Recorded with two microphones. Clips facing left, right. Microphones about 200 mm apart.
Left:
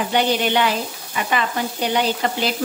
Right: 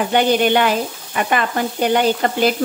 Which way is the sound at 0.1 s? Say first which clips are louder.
Right 4 dB; 50° right (ahead or behind).